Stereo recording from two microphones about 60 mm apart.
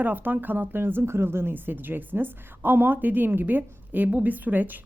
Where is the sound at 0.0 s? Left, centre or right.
Right.